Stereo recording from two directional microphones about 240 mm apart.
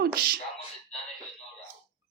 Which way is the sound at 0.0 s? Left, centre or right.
Right.